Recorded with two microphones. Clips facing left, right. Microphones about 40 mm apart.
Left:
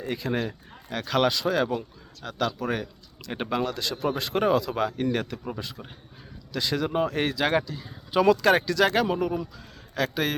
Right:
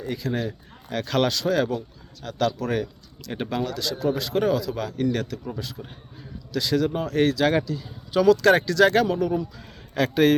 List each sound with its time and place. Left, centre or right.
0.1 s speech: left
0.9 s speech: centre
9.6 s a man's voice: centre